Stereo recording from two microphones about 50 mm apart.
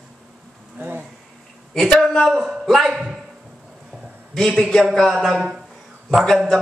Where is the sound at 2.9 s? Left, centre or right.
Centre.